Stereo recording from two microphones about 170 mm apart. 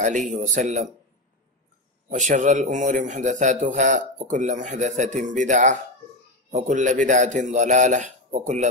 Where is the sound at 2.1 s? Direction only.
45° right (ahead or behind).